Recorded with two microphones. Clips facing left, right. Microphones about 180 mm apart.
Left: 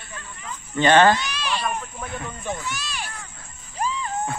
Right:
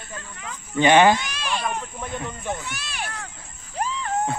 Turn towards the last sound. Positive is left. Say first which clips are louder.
# left 1 dB
turn(degrees=-65)  # may be behind; listen again after turning